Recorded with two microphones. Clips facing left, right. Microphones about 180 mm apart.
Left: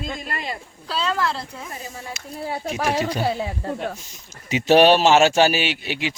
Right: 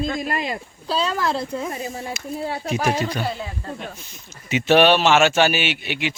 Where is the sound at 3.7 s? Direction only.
45° left (ahead or behind).